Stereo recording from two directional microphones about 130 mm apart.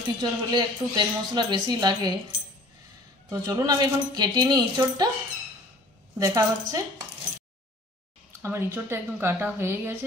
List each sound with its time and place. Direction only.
0.2 s speech: 35° right (ahead or behind)
3.3 s speech: 30° right (ahead or behind)
6.1 s speech: 25° right (ahead or behind)
8.4 s speech: 20° right (ahead or behind)